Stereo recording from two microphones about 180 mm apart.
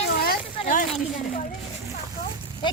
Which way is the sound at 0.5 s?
45° left (ahead or behind).